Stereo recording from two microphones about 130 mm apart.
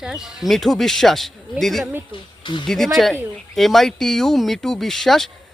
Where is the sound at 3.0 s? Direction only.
Centre (ahead or behind).